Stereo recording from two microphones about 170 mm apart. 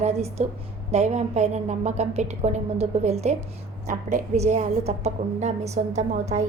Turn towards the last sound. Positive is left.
turn(degrees=-40)  # may be behind; listen again after turning